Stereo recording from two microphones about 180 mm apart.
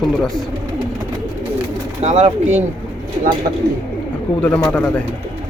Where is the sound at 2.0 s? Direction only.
35° right (ahead or behind).